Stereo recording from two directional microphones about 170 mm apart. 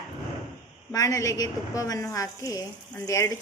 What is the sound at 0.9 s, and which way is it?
A woman's voice, 20° left (ahead or behind).